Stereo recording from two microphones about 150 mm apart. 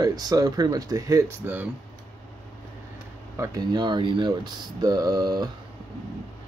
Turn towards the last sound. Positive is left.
turn(degrees=-25)  # may be behind; listen again after turning